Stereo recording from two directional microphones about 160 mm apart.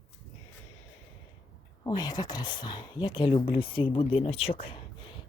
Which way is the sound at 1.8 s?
25° left (ahead or behind).